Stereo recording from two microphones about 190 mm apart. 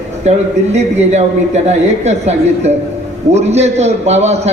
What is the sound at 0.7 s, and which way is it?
A man's voice, 35° right (ahead or behind).